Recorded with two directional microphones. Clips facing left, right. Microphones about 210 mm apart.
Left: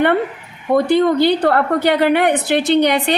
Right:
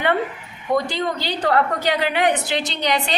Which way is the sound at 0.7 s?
60° left (ahead or behind).